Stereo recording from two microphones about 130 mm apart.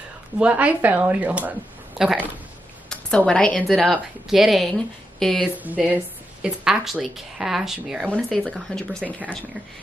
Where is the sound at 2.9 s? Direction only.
5° left (ahead or behind).